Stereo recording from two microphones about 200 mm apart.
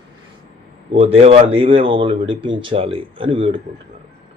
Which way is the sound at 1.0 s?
30° right (ahead or behind).